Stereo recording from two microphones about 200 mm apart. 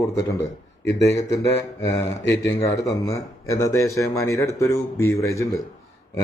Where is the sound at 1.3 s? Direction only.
15° left (ahead or behind).